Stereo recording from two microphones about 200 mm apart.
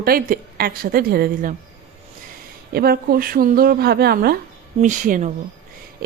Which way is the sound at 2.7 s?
50° right (ahead or behind).